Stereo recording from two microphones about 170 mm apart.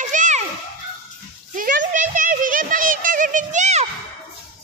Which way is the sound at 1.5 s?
50° right (ahead or behind).